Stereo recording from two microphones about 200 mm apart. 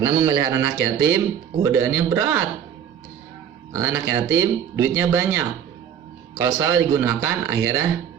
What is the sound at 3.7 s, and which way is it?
A man's voice, 10° right (ahead or behind).